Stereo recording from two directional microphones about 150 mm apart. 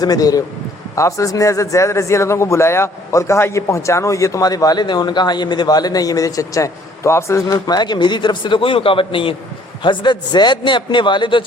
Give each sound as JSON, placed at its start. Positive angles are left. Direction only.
{"t": 0.0, "sound": "a man's voice", "side_deg": 25}